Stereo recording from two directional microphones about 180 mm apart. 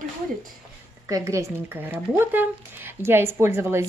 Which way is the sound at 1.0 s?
15° right (ahead or behind).